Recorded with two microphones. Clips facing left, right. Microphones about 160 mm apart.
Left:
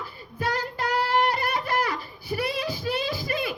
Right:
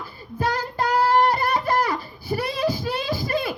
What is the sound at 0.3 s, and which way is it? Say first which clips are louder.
Child singing: right 4 dB; 40° right (ahead or behind).